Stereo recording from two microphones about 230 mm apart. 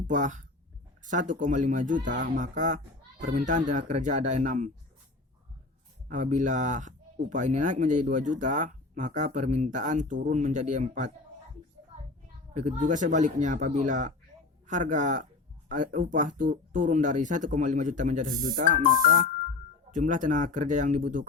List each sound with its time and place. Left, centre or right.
0.1 s speech: right
6.1 s speech: right
12.5 s speech: right